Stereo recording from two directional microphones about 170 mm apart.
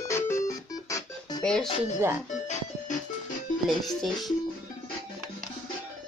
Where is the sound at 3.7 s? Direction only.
Centre (ahead or behind).